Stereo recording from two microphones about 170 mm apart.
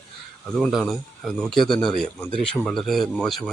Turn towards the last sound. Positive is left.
turn(degrees=0)  # may be behind; listen again after turning